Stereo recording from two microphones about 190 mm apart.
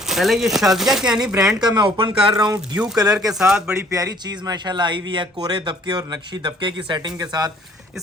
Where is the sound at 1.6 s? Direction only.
25° right (ahead or behind).